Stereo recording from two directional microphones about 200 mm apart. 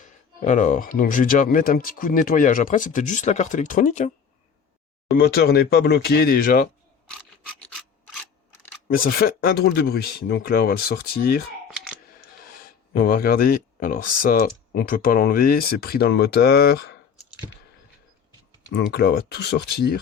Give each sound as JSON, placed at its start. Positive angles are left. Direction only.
{"t": 0.0, "sound": "speech", "side_deg": 40}
{"t": 5.1, "sound": "speech", "side_deg": 50}
{"t": 7.6, "sound": "scissors", "side_deg": 0}
{"t": 9.0, "sound": "speech", "side_deg": 50}
{"t": 12.6, "sound": "speech", "side_deg": 45}
{"t": 18.7, "sound": "speech", "side_deg": 55}